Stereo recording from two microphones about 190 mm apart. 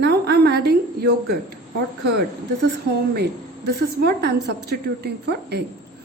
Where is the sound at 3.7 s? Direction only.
60° right (ahead or behind).